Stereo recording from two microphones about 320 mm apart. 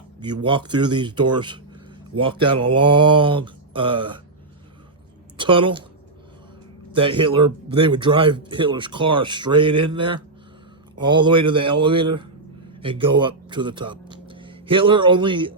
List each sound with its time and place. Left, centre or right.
0.4 s speech: centre
5.4 s speech: centre
6.9 s speech: centre